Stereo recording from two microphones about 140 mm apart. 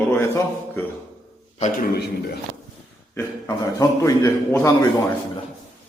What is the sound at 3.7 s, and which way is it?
A man's voice, 25° left (ahead or behind).